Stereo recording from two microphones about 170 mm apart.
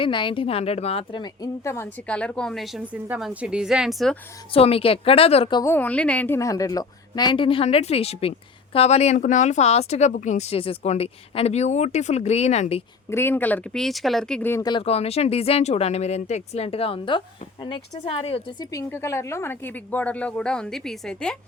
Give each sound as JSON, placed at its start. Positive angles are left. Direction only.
{"t": 0.0, "sound": "a woman's voice", "side_deg": 30}
{"t": 4.5, "sound": "speech", "side_deg": 35}
{"t": 5.6, "sound": "a woman's voice", "side_deg": 10}
{"t": 13.1, "sound": "a woman's voice", "side_deg": 15}
{"t": 14.6, "sound": "speech", "side_deg": 30}
{"t": 18.6, "sound": "a woman's voice", "side_deg": 20}